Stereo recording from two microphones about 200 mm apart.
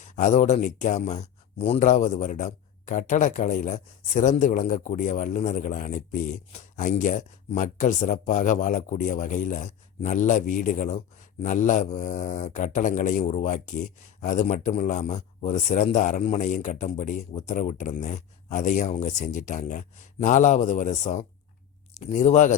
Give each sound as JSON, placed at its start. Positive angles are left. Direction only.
{"t": 0.0, "sound": "speech", "side_deg": 40}